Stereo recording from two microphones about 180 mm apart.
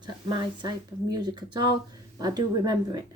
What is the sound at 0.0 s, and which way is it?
Speech, 25° right (ahead or behind).